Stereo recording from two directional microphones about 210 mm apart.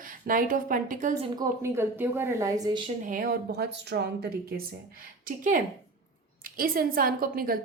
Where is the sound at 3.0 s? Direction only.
40° right (ahead or behind).